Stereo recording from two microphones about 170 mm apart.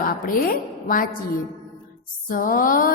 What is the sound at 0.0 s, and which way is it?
A woman's voice, 55° left (ahead or behind).